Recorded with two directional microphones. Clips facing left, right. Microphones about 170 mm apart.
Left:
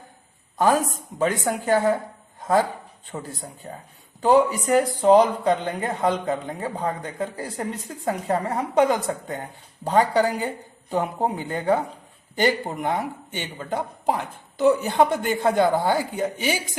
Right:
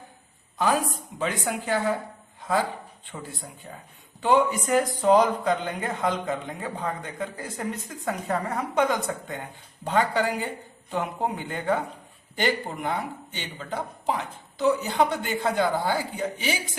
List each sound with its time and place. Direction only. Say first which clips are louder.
1.2 s speech: left 5 dB; 45° left (ahead or behind)